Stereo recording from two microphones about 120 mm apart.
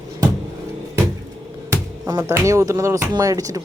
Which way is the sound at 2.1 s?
25° right (ahead or behind).